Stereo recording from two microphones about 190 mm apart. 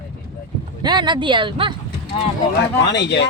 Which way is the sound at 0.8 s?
20° right (ahead or behind).